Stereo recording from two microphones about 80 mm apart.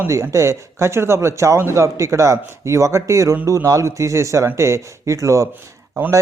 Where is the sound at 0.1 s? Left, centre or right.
Right.